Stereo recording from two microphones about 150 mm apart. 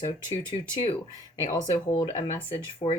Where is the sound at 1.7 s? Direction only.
45° left (ahead or behind).